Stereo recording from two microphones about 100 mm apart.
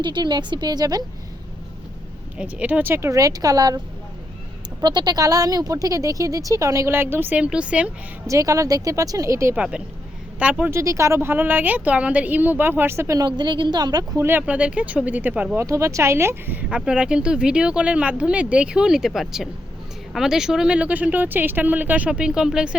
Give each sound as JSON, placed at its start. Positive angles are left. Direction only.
{"t": 0.0, "sound": "a woman's voice", "side_deg": -50}
{"t": 2.4, "sound": "speech", "side_deg": -15}
{"t": 4.8, "sound": "speech", "side_deg": -45}
{"t": 8.3, "sound": "speech", "side_deg": -35}
{"t": 9.6, "sound": "speech", "side_deg": -10}
{"t": 10.7, "sound": "speech", "side_deg": -30}
{"t": 13.1, "sound": "a woman's voice", "side_deg": -50}
{"t": 14.2, "sound": "speech", "side_deg": -20}
{"t": 15.5, "sound": "speech", "side_deg": -30}
{"t": 16.6, "sound": "speech", "side_deg": -10}